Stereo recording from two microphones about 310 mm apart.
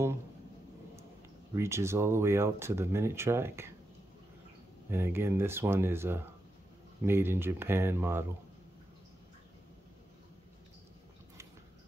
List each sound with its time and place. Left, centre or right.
1.5 s speech: centre
4.9 s speech: centre